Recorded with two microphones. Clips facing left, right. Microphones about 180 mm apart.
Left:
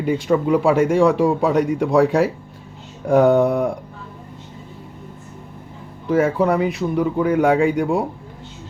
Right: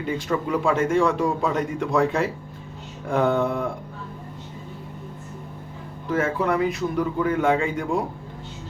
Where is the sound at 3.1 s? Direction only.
15° left (ahead or behind).